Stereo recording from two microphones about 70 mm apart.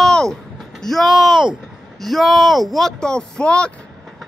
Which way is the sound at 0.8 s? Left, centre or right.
Centre.